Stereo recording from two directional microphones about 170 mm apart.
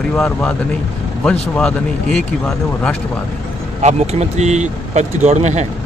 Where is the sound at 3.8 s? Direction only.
40° right (ahead or behind).